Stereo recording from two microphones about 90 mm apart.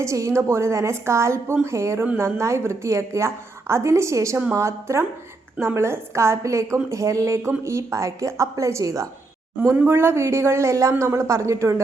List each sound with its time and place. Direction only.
0.0 s a woman's voice: 35° right (ahead or behind)